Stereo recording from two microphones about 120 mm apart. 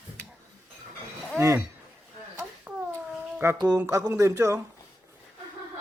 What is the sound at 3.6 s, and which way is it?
Speech, 30° right (ahead or behind).